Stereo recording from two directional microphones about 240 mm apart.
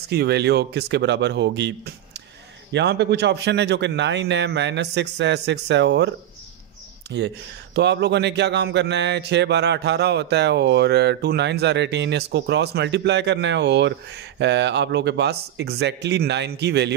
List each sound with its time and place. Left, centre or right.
0.1 s speech: right